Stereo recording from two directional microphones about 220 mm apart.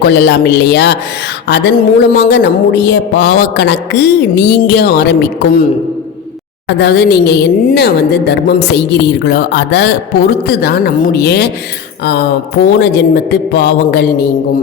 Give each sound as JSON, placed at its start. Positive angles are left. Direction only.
{"t": 0.0, "sound": "speech", "side_deg": 50}
{"t": 6.7, "sound": "speech", "side_deg": 50}
{"t": 12.6, "sound": "speech", "side_deg": 50}